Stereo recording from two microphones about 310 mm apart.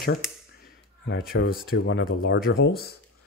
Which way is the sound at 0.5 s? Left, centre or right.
Left.